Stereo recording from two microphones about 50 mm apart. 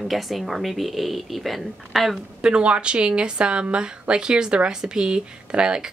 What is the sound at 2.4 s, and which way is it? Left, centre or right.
A woman's voice, right.